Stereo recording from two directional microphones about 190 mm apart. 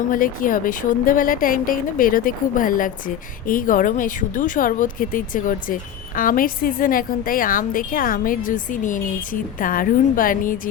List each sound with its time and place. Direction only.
0.1 s speech: 45° left (ahead or behind)